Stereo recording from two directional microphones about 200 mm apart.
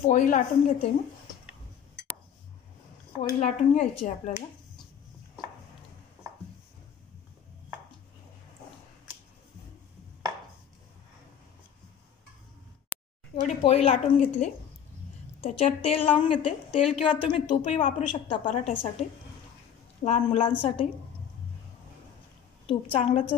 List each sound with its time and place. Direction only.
0.0 s speech: 40° left (ahead or behind)
3.2 s speech: 35° left (ahead or behind)
12.9 s a sound: 5° left (ahead or behind)
13.7 s a woman's voice: 35° left (ahead or behind)
22.7 s a woman's voice: 25° left (ahead or behind)